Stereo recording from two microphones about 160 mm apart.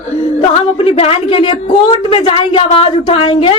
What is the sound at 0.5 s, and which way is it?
A woman's voice, 35° left (ahead or behind).